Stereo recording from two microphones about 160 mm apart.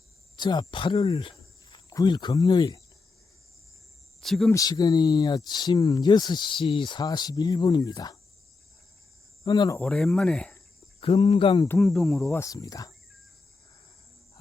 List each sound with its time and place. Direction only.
0.3 s speech: 30° left (ahead or behind)
4.2 s speech: centre (ahead or behind)
4.5 s speech: 25° left (ahead or behind)
9.4 s cricket: 25° left (ahead or behind)
9.7 s speech: 5° left (ahead or behind)
11.0 s speech: 35° left (ahead or behind)
11.8 s speech: 5° left (ahead or behind)
12.4 s speech: 20° left (ahead or behind)